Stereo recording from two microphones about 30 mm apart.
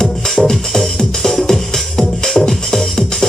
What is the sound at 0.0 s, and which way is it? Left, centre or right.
Music, centre.